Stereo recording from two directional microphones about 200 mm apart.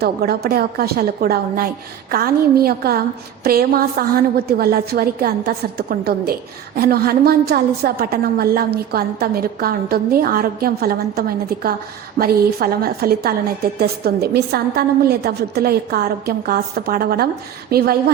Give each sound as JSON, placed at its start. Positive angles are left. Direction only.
{"t": 0.0, "sound": "a woman's voice", "side_deg": -50}